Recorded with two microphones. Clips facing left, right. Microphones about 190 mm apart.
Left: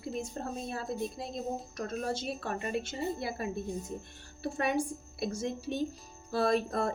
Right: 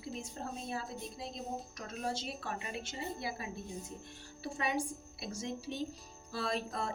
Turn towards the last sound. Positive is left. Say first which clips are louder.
# left 8 dB
turn(degrees=55)  # may be behind; listen again after turning